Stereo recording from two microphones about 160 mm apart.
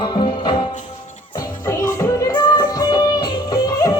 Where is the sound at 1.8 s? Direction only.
20° left (ahead or behind).